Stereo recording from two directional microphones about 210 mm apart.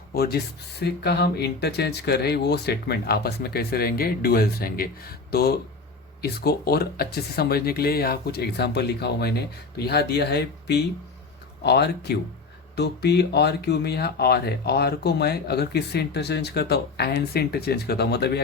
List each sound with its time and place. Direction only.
0.1 s speech: 45° left (ahead or behind)